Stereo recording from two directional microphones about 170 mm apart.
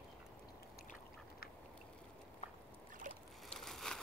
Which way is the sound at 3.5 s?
Centre (ahead or behind).